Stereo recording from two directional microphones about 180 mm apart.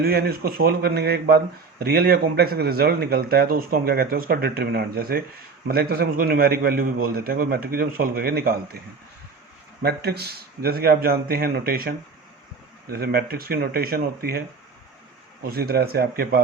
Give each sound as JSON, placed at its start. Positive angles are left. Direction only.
{"t": 0.0, "sound": "speech", "side_deg": -60}
{"t": 9.8, "sound": "speech", "side_deg": -65}
{"t": 15.4, "sound": "speech", "side_deg": -60}